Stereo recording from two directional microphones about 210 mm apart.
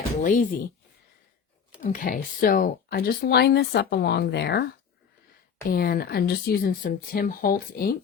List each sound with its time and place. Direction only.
0.2 s speech: 40° left (ahead or behind)
1.8 s speech: 40° left (ahead or behind)
5.6 s speech: 45° left (ahead or behind)